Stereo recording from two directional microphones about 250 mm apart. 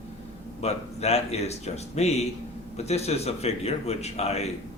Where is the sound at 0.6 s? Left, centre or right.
Left.